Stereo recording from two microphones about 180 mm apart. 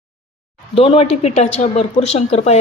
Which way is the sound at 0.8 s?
35° left (ahead or behind).